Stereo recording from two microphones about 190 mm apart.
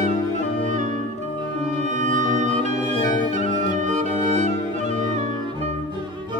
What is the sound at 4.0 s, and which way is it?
Music, 40° right (ahead or behind).